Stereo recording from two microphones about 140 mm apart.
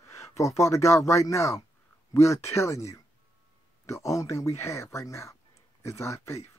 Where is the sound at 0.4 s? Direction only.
20° left (ahead or behind).